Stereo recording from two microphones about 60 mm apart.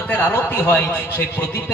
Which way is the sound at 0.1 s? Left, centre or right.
Left.